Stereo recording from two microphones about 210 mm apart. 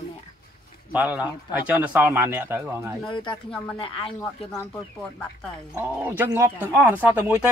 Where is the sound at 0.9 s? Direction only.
5° right (ahead or behind).